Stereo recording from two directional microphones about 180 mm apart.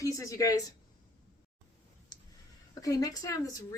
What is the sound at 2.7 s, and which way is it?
Speech, 20° left (ahead or behind).